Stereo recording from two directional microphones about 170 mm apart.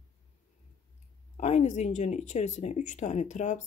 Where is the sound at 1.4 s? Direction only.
45° left (ahead or behind).